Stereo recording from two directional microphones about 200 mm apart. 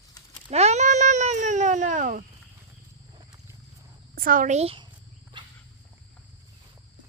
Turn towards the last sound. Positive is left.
turn(degrees=-25)  # may be behind; listen again after turning